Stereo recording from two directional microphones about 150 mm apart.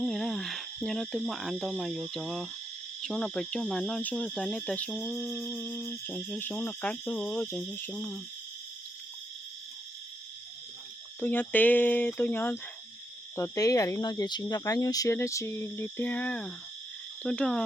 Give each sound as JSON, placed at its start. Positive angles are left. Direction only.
{"t": 0.0, "sound": "cricket", "side_deg": 0}
{"t": 2.1, "sound": "speech", "side_deg": 0}
{"t": 11.2, "sound": "speech", "side_deg": 10}